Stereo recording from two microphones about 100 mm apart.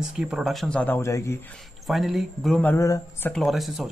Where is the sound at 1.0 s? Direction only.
30° left (ahead or behind).